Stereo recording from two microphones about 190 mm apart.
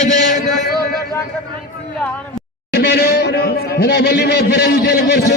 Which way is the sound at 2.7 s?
60° left (ahead or behind).